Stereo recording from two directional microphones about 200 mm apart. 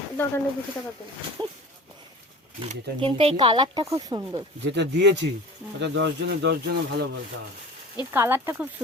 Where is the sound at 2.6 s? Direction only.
25° right (ahead or behind).